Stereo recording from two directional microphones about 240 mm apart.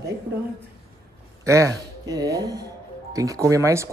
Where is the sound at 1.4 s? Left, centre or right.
Centre.